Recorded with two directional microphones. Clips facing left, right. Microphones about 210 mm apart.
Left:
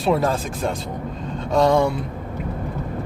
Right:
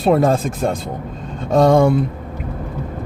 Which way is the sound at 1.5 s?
50° right (ahead or behind).